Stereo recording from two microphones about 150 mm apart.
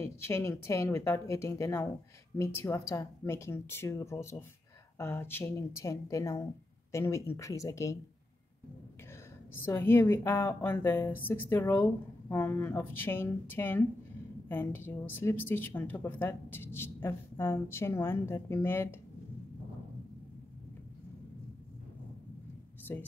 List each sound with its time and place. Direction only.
0.0 s a woman's voice: 20° left (ahead or behind)
9.6 s a woman's voice: 15° left (ahead or behind)
22.9 s a woman's voice: 15° left (ahead or behind)